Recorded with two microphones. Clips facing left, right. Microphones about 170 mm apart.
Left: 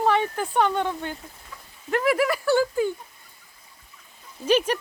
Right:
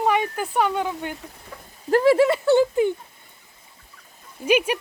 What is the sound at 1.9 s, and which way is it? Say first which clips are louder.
Speech: right 6 dB; 30° right (ahead or behind).